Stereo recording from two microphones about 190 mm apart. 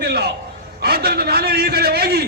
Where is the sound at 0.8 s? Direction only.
55° right (ahead or behind).